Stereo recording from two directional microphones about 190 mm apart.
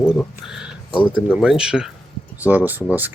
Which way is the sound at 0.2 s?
Centre (ahead or behind).